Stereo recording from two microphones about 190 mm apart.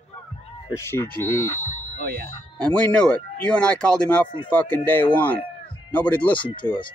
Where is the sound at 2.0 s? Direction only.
55° right (ahead or behind).